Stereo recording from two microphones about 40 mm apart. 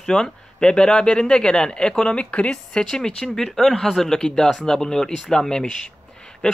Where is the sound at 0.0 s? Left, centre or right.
Centre.